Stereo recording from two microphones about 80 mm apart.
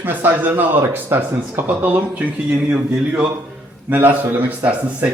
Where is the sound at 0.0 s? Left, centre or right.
Right.